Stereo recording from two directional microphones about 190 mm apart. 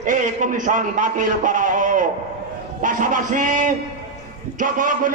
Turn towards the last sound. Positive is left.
turn(degrees=-45)  # may be behind; listen again after turning